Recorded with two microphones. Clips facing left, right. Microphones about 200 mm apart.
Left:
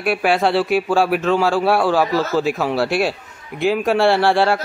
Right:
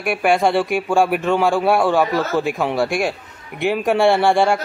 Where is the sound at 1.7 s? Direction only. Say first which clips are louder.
Right 1 dB; 5° left (ahead or behind).